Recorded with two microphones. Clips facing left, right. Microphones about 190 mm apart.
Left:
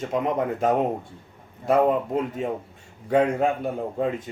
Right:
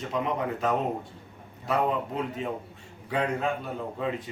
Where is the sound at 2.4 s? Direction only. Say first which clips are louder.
Left 4 dB; 50° left (ahead or behind).